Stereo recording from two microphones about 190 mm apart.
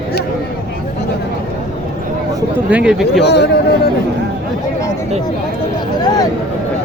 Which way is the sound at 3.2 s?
60° left (ahead or behind).